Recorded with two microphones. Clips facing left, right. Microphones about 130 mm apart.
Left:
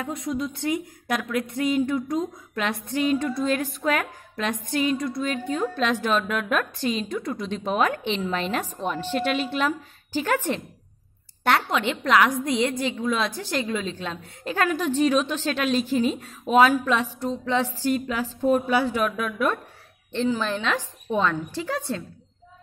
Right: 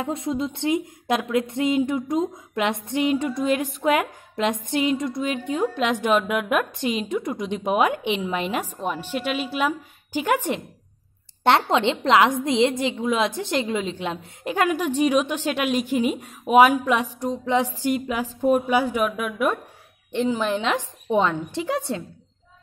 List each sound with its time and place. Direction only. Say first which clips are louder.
0.0 s a woman's voice: right 3 dB; 25° right (ahead or behind)
11.4 s a woman's voice: right 4 dB; 25° right (ahead or behind)